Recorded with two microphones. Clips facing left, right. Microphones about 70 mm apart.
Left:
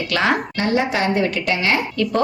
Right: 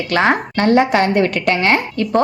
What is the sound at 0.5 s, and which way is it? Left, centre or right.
A woman's voice, right.